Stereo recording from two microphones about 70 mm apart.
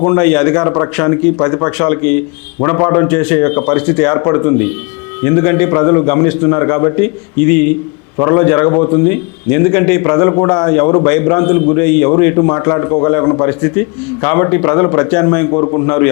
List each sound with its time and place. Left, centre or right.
0.0 s a man's voice: left
15.6 s a man's voice: left